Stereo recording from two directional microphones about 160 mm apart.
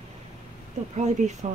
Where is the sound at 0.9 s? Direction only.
45° right (ahead or behind).